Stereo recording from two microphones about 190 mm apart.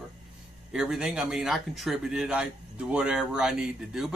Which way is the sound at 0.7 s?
5° right (ahead or behind).